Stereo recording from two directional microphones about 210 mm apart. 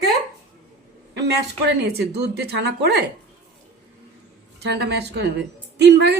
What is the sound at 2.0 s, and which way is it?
Speech, 50° right (ahead or behind).